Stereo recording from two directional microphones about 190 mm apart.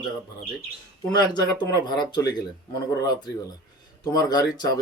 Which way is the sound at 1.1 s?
20° left (ahead or behind).